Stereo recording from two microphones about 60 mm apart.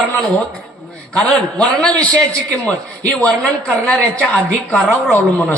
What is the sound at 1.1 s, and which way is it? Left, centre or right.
Speech, centre.